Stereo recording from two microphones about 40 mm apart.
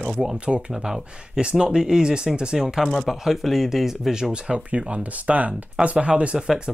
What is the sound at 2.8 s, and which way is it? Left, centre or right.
Speech, centre.